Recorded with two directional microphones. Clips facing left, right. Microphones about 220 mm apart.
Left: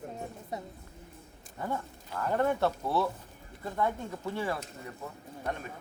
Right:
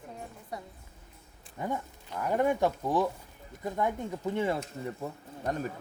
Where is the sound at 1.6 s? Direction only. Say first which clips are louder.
Right 1 dB; 15° right (ahead or behind).